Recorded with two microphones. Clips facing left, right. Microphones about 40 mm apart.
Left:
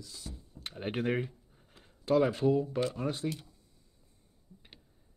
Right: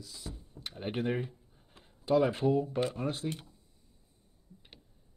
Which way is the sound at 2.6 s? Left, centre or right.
Centre.